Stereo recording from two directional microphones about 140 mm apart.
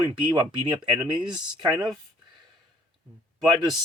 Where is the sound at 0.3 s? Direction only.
30° right (ahead or behind).